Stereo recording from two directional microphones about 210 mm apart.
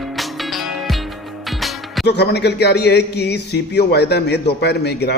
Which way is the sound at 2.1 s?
50° left (ahead or behind).